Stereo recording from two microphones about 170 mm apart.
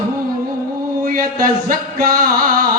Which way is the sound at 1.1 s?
55° right (ahead or behind).